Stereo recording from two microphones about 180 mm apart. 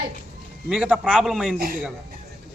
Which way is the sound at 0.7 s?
5° right (ahead or behind).